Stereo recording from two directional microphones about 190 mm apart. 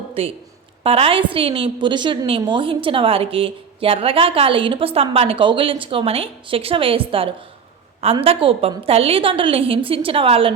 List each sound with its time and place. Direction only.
0.1 s a woman's voice: 30° right (ahead or behind)